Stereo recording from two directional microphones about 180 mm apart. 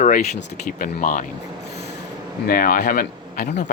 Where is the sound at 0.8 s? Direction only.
50° left (ahead or behind).